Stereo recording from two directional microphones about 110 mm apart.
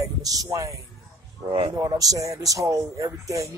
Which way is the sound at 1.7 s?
30° right (ahead or behind).